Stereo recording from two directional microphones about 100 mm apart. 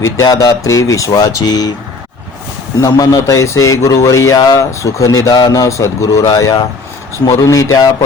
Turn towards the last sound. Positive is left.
turn(degrees=35)  # may be behind; listen again after turning